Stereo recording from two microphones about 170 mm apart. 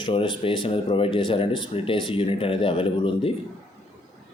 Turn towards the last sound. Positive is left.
turn(degrees=30)  # may be behind; listen again after turning